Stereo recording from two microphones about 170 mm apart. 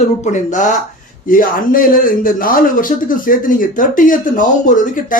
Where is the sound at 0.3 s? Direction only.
50° left (ahead or behind).